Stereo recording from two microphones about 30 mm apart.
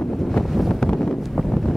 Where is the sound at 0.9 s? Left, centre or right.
Centre.